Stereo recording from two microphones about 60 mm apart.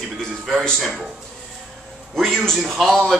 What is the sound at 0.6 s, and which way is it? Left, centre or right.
Speech, centre.